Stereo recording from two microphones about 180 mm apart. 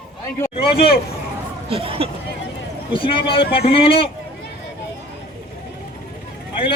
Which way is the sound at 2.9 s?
30° left (ahead or behind).